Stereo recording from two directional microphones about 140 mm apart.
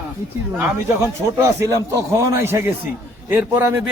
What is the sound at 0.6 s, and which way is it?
A man's voice, 20° right (ahead or behind).